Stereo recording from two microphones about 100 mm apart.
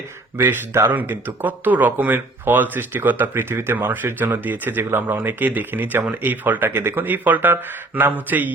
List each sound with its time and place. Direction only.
0.3 s speech: 25° right (ahead or behind)